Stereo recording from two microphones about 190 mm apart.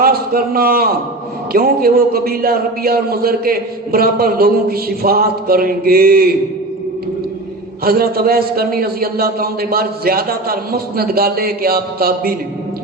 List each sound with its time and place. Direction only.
0.0 s a man's voice: 50° right (ahead or behind)
7.9 s a man's voice: 50° right (ahead or behind)